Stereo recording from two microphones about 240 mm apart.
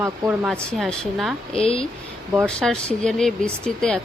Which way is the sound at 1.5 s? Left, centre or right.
Left.